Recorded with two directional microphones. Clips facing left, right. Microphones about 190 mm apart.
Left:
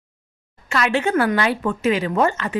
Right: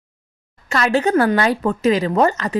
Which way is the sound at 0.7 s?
40° right (ahead or behind).